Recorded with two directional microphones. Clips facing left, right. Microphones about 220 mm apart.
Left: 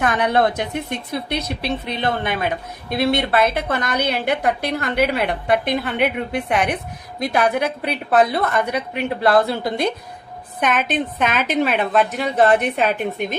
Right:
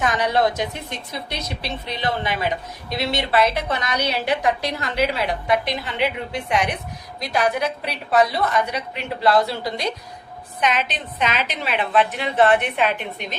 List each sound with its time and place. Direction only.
0.0 s a woman's voice: 55° left (ahead or behind)